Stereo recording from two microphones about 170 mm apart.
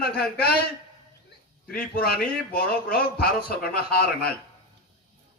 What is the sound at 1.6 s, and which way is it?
A man's voice, 65° left (ahead or behind).